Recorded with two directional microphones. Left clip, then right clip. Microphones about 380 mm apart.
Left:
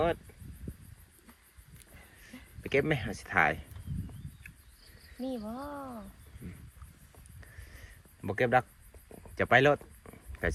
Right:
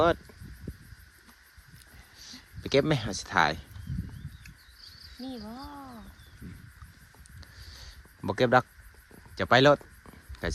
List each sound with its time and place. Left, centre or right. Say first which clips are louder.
2.3 s speech: right 4 dB; centre
5.2 s speech: left 3 dB; centre
8.2 s speech: right 4 dB; centre
9.3 s a sound: right 3 dB; centre